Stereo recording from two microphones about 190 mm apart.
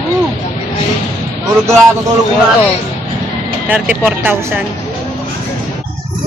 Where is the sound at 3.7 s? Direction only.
10° right (ahead or behind).